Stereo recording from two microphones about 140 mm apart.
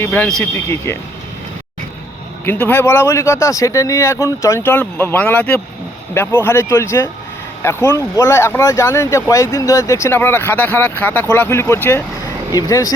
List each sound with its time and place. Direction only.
0.0 s speech: 10° left (ahead or behind)
0.5 s speech: 20° left (ahead or behind)
2.4 s speech: 15° left (ahead or behind)